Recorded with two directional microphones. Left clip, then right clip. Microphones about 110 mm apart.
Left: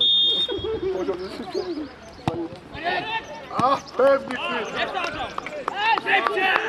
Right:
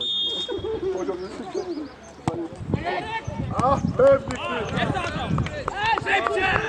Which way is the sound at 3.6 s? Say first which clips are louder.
Right 1 dB; 15° left (ahead or behind).